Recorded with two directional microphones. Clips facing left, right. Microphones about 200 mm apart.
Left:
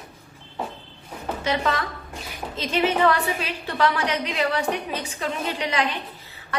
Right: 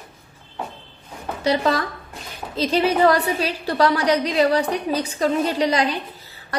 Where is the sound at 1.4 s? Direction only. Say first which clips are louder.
Right 5 dB; 35° right (ahead or behind).